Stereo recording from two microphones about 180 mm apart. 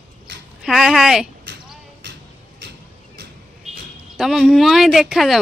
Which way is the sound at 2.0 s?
75° right (ahead or behind).